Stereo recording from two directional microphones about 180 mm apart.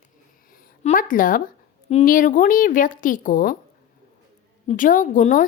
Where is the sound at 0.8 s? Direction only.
50° left (ahead or behind).